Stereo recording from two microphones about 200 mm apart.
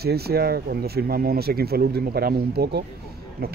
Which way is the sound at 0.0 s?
50° right (ahead or behind).